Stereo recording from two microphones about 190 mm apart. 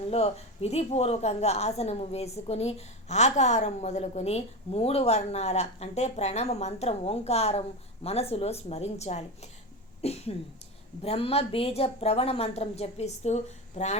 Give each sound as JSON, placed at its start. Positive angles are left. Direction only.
{"t": 0.1, "sound": "a woman's voice", "side_deg": 35}